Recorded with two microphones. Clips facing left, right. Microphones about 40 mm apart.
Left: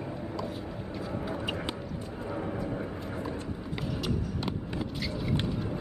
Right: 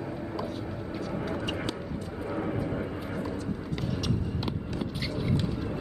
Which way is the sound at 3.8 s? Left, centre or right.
Centre.